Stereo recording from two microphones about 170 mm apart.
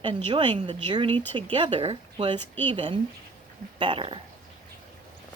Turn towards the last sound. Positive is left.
turn(degrees=-30)  # may be behind; listen again after turning